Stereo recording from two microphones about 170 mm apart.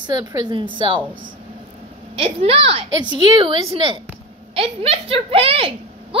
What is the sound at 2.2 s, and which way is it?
A woman's voice, 35° right (ahead or behind).